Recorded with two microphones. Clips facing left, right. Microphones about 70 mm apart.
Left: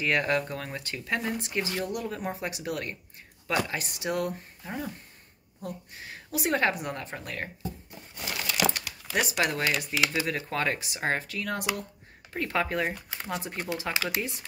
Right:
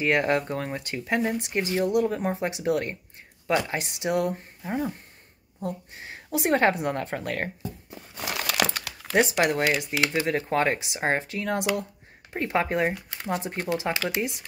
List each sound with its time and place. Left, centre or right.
0.0 s a woman's voice: right
7.9 s crumpling: right
9.1 s a woman's voice: right